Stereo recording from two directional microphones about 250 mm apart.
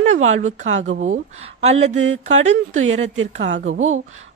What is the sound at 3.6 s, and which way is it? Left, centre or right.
Speech, right.